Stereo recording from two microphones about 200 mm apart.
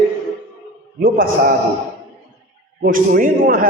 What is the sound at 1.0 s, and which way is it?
Speech, 45° right (ahead or behind).